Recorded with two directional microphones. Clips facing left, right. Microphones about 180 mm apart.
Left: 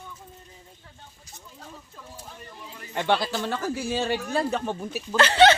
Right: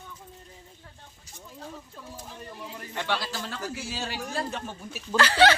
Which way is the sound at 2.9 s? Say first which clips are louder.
Left 7 dB; 55° left (ahead or behind).